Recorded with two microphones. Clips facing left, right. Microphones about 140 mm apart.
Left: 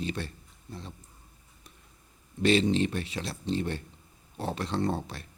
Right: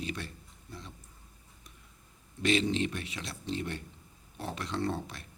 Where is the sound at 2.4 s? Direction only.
35° left (ahead or behind).